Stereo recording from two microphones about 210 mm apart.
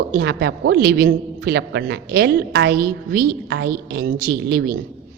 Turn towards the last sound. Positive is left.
turn(degrees=-50)  # may be behind; listen again after turning